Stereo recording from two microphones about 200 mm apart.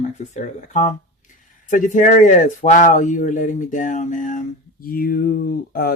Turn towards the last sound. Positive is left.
turn(degrees=50)  # may be behind; listen again after turning